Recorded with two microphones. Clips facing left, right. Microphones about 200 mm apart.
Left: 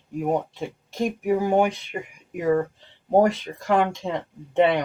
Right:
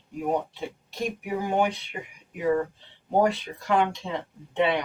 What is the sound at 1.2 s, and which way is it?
Speech, 50° left (ahead or behind).